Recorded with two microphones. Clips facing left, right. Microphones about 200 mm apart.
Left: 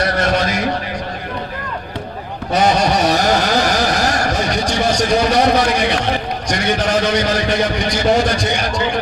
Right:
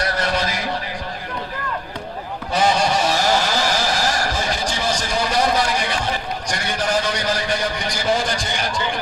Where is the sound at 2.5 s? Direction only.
65° left (ahead or behind).